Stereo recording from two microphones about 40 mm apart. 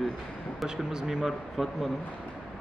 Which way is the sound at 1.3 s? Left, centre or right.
Centre.